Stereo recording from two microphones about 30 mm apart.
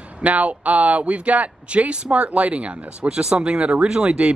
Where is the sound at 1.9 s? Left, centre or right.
Right.